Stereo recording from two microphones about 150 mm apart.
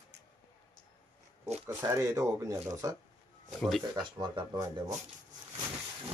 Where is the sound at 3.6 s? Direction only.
Centre (ahead or behind).